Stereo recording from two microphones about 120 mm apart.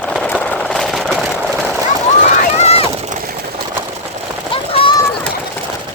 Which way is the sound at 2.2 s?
60° left (ahead or behind).